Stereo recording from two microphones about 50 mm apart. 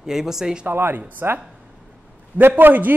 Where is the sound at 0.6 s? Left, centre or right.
Right.